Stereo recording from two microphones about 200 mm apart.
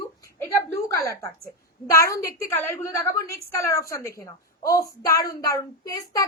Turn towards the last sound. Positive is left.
turn(degrees=15)  # may be behind; listen again after turning